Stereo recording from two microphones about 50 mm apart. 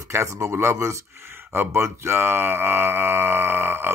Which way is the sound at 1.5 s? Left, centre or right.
Right.